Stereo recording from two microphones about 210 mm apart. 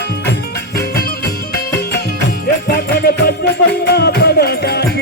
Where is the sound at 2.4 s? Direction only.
45° left (ahead or behind).